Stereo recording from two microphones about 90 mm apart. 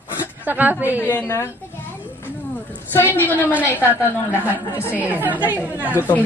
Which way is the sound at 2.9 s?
25° left (ahead or behind).